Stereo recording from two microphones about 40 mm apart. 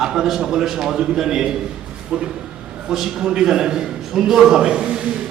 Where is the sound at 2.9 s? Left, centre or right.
Centre.